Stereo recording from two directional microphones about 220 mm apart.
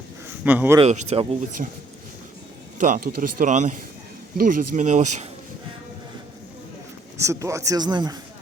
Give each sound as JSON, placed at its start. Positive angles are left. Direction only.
{"t": 0.4, "sound": "a man's voice", "side_deg": -10}
{"t": 0.8, "sound": "speech", "side_deg": -30}
{"t": 7.2, "sound": "a man's voice", "side_deg": -15}